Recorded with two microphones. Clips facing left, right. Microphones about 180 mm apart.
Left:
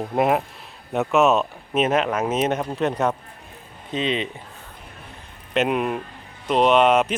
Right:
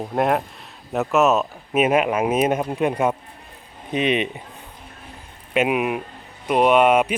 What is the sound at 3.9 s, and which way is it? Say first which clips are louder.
Speech: right 3 dB; 20° right (ahead or behind).